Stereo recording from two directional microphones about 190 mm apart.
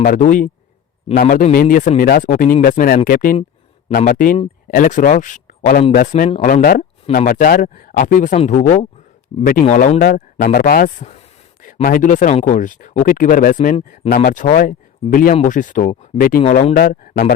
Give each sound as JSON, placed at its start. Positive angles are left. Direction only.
{"t": 0.0, "sound": "speech", "side_deg": 45}
{"t": 9.6, "sound": "speech", "side_deg": 40}
{"t": 16.4, "sound": "speech", "side_deg": 35}